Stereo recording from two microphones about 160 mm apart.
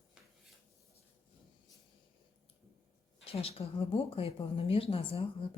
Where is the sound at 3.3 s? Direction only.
35° left (ahead or behind).